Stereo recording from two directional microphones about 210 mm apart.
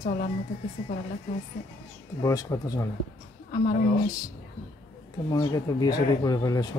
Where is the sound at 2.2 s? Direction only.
15° left (ahead or behind).